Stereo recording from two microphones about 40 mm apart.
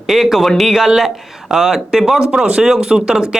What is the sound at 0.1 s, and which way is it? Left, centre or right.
Speech, centre.